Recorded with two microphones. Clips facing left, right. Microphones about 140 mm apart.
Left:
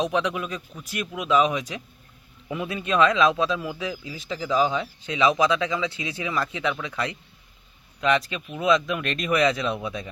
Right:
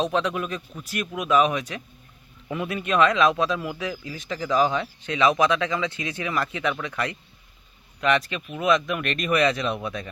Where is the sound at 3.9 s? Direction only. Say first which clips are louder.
Even; 10° left (ahead or behind).